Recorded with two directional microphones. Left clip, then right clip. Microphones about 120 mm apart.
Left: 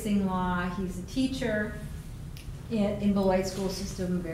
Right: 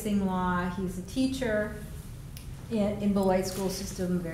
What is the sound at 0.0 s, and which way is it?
A woman's voice, 25° right (ahead or behind).